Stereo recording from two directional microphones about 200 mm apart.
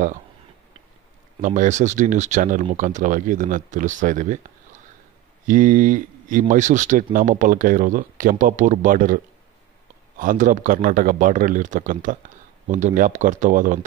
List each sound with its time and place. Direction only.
1.4 s speech: 40° right (ahead or behind)
5.5 s speech: 40° right (ahead or behind)